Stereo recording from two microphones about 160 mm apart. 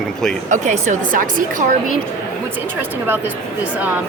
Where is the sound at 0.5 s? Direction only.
50° right (ahead or behind).